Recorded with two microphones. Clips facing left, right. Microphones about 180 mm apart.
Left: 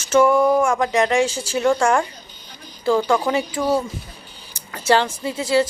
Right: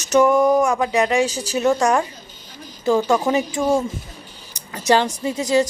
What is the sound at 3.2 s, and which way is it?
Speech, 25° right (ahead or behind).